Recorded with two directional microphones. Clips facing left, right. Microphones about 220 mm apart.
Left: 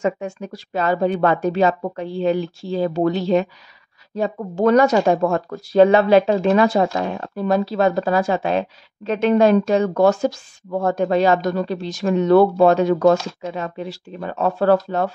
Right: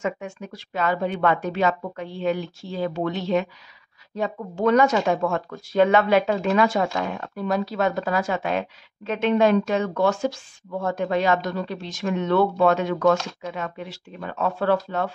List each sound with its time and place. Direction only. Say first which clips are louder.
0.0 s speech: left 6 dB; 35° left (ahead or behind)